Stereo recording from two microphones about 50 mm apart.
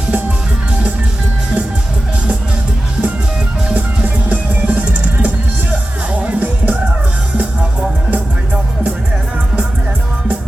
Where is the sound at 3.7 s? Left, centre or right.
Right.